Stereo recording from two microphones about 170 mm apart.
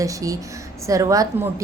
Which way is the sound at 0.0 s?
20° right (ahead or behind).